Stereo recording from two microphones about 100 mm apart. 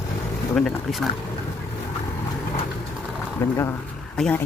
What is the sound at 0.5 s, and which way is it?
Speech, 5° left (ahead or behind).